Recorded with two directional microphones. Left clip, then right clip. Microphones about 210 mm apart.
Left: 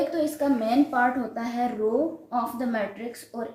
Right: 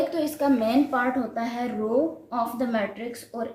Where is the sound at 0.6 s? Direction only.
30° right (ahead or behind).